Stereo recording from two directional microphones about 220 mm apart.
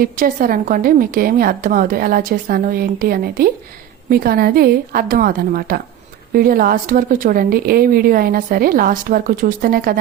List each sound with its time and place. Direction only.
0.0 s a woman's voice: 40° right (ahead or behind)